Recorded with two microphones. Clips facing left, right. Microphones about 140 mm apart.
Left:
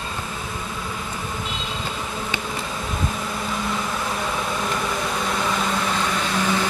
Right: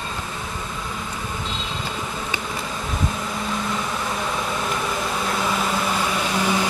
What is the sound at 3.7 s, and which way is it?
Vehicle, centre (ahead or behind).